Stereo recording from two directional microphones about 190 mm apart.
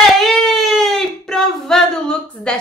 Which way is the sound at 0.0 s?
Centre (ahead or behind).